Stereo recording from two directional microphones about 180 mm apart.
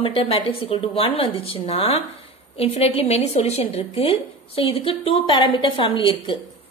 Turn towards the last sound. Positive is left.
turn(degrees=25)  # may be behind; listen again after turning